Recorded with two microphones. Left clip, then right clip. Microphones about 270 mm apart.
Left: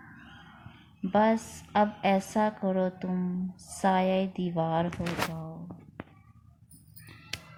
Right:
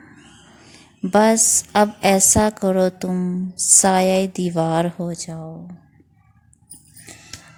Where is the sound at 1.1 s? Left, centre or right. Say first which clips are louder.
Right 10 dB; right.